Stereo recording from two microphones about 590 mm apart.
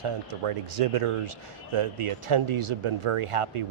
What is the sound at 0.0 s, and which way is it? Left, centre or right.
Speech, right.